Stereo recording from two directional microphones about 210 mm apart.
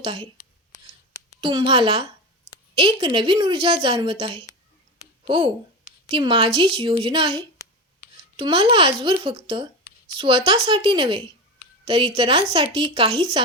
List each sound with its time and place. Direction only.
0.0 s a woman's voice: 25° right (ahead or behind)
1.4 s a woman's voice: 25° right (ahead or behind)